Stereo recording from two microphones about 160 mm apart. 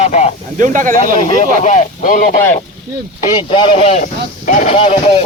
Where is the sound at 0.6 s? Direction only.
55° right (ahead or behind).